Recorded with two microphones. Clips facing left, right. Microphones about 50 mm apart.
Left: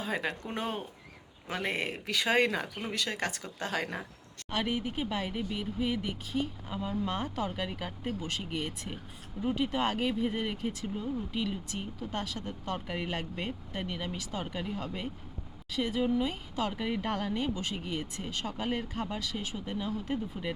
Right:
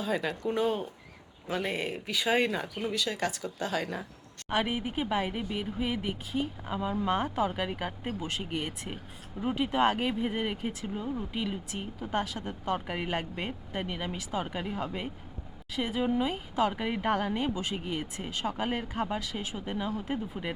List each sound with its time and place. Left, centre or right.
0.0 s speech: left
2.8 s speech: left
4.4 s speech: centre